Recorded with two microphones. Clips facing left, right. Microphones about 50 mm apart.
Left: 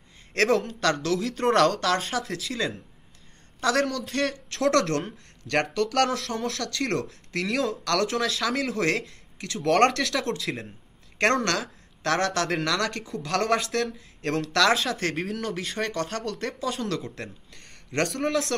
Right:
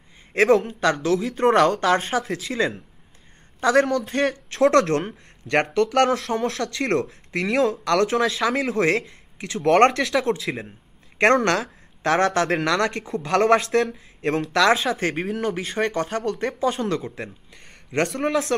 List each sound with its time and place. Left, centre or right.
0.3 s speech: centre
1.8 s speech: right
3.6 s speech: centre
4.1 s speech: right
11.2 s a man's voice: centre
17.2 s speech: centre